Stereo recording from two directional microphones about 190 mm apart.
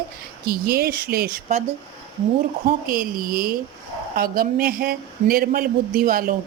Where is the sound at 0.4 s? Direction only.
55° right (ahead or behind).